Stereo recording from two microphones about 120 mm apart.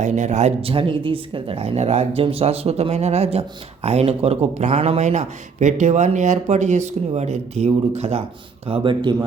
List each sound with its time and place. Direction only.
0.0 s speech: 80° right
0.7 s speech: 50° right (ahead or behind)
8.6 s speech: 50° right (ahead or behind)